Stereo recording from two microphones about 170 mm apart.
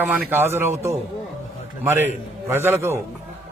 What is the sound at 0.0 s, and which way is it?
A man's voice, 10° right (ahead or behind).